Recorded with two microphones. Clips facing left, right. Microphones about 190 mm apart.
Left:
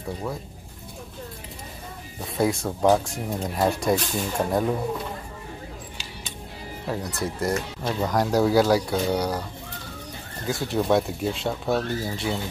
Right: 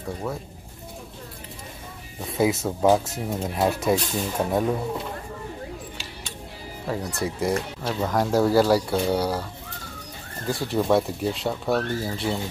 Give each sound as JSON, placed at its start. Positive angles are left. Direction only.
{"t": 2.3, "sound": "speech", "side_deg": -5}
{"t": 6.9, "sound": "speech", "side_deg": 0}
{"t": 10.4, "sound": "speech", "side_deg": 0}